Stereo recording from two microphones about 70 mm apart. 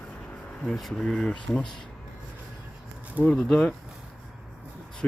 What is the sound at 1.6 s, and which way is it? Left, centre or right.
Speech, left.